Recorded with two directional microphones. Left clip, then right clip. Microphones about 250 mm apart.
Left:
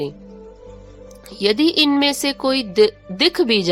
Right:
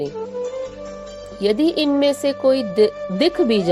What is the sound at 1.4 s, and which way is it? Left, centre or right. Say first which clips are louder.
Speech: left 2 dB; left.